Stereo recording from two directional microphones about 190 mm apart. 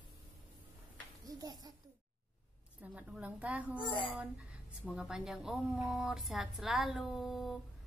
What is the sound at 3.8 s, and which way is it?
Speech, 25° left (ahead or behind).